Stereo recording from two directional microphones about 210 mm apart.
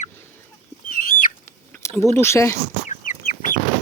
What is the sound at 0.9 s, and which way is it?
Bird flight, 40° left (ahead or behind).